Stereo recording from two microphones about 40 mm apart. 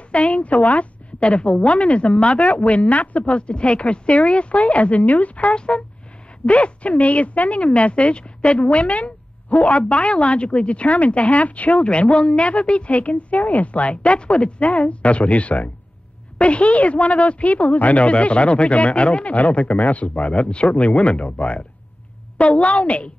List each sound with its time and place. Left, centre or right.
0.1 s a woman's voice: left